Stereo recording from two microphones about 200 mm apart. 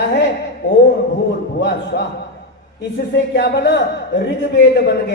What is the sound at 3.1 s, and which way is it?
A man's voice, 55° left (ahead or behind).